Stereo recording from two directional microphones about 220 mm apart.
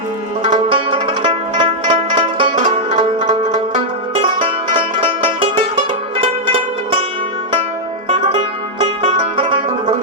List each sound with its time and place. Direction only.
0.4 s music: 25° right (ahead or behind)
8.1 s music: 25° right (ahead or behind)